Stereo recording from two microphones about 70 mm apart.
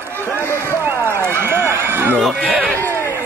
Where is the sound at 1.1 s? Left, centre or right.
Right.